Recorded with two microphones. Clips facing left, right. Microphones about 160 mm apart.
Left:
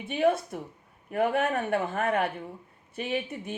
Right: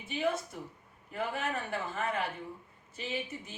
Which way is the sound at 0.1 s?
60° left (ahead or behind).